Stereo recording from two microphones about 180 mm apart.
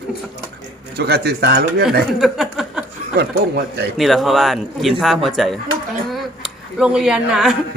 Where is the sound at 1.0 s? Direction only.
65° right (ahead or behind).